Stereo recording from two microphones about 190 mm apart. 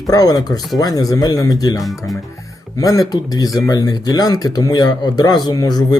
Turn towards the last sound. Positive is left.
turn(degrees=20)  # may be behind; listen again after turning